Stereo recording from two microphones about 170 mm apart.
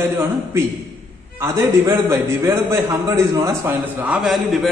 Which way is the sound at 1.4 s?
20° right (ahead or behind).